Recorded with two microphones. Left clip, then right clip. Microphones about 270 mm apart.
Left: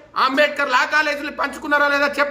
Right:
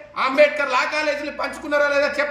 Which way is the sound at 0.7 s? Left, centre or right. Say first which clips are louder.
Left 3 dB; centre.